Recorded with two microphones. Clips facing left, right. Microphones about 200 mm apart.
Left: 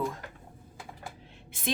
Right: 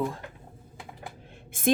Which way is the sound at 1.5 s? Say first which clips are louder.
Right 9 dB; 50° right (ahead or behind).